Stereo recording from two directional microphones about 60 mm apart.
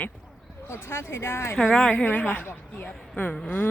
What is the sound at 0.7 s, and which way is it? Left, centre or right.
Speech, left.